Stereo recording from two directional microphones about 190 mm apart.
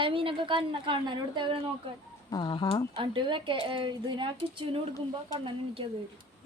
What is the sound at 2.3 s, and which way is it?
Speech, 25° left (ahead or behind).